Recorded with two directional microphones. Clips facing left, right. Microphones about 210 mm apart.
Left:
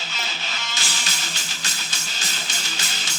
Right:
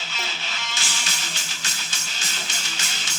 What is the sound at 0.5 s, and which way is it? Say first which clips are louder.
Music: left 1 dB; 40° left (ahead or behind).